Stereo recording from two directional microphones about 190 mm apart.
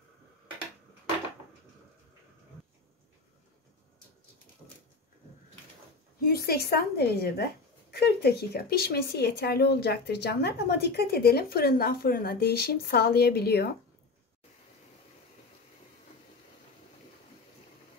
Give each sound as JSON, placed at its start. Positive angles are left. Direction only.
{"t": 6.2, "sound": "speech", "side_deg": 55}